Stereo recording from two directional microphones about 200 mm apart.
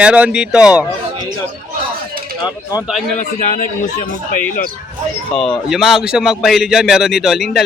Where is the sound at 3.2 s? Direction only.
40° left (ahead or behind).